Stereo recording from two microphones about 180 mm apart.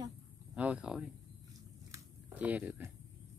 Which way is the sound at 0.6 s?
5° right (ahead or behind).